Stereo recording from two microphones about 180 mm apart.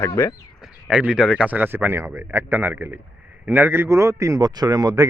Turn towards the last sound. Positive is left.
turn(degrees=-20)  # may be behind; listen again after turning